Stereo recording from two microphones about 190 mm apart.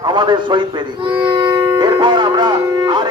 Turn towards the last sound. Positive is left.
turn(degrees=-25)  # may be behind; listen again after turning